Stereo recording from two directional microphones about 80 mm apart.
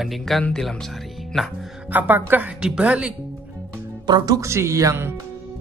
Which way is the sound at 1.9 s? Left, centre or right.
Right.